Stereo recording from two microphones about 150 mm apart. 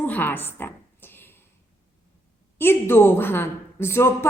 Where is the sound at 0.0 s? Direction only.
10° left (ahead or behind).